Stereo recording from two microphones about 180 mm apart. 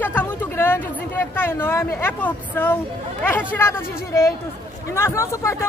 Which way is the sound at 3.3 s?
10° left (ahead or behind).